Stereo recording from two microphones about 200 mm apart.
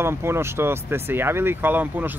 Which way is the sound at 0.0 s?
10° right (ahead or behind).